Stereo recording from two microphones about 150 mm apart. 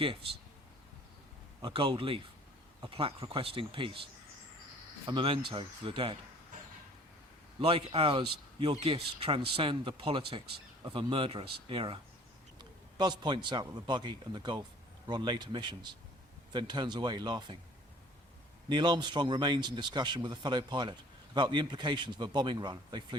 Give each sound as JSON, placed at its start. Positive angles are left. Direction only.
{"t": 0.0, "sound": "speech", "side_deg": -35}
{"t": 1.6, "sound": "speech", "side_deg": -35}
{"t": 7.6, "sound": "a man's voice", "side_deg": -40}
{"t": 18.7, "sound": "speech", "side_deg": -30}